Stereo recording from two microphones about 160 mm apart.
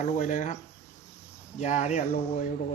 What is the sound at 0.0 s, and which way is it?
Speech, 45° left (ahead or behind).